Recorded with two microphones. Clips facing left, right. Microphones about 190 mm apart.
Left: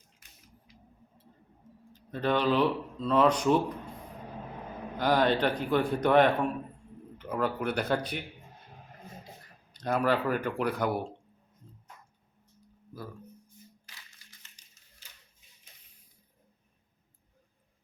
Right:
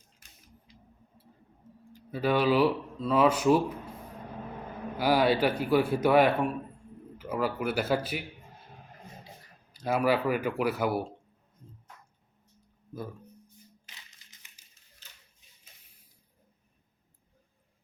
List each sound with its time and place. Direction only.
1.9 s speech: 5° right (ahead or behind)
4.9 s a man's voice: 10° right (ahead or behind)
9.7 s speech: 5° right (ahead or behind)
13.8 s crushing: 20° right (ahead or behind)
15.0 s a sound: 10° left (ahead or behind)